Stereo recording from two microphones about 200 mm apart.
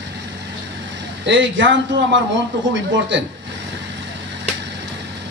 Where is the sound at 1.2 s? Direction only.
65° right (ahead or behind).